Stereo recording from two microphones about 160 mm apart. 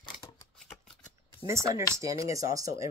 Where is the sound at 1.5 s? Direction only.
20° right (ahead or behind).